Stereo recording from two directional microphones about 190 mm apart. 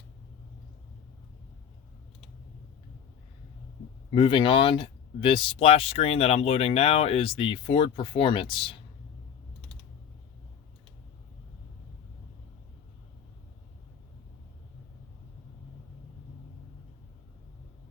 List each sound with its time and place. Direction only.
4.1 s speech: 25° left (ahead or behind)